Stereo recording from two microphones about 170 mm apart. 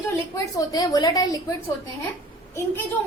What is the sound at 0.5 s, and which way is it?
Speech, 20° left (ahead or behind).